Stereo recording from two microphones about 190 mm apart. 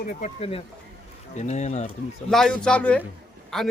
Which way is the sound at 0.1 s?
35° left (ahead or behind).